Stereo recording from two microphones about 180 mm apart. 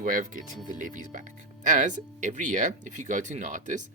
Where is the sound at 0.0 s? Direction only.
45° right (ahead or behind).